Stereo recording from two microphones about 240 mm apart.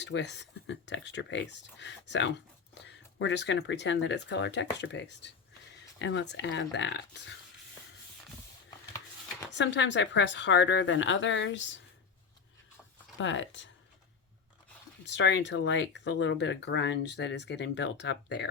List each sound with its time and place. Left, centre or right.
0.0 s speech: left
9.6 s speech: left
13.1 s speech: left
15.0 s speech: left